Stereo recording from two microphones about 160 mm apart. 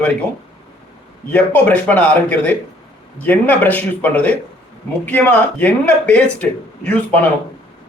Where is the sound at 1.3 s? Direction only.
10° left (ahead or behind).